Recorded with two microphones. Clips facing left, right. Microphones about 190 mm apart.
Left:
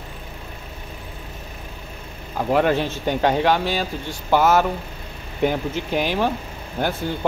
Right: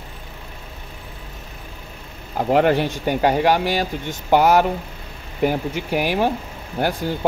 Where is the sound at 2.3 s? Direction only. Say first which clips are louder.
Right 2 dB; 15° right (ahead or behind).